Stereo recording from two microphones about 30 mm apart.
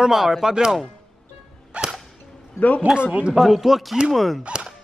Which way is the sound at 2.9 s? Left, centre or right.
Right.